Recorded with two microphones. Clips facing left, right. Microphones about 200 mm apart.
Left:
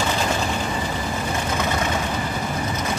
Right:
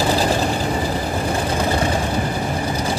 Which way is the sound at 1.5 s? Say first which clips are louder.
Right 3 dB; 30° right (ahead or behind).